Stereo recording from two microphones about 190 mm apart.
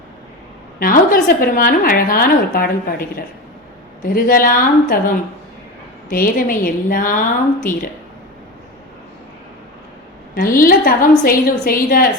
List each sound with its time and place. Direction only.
0.8 s a woman's voice: 50° left (ahead or behind)
10.3 s a woman's voice: 50° left (ahead or behind)